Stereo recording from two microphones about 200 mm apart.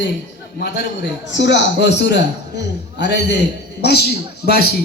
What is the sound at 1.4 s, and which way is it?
Speech, 60° left (ahead or behind).